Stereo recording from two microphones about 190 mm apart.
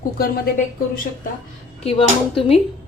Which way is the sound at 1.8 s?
30° left (ahead or behind).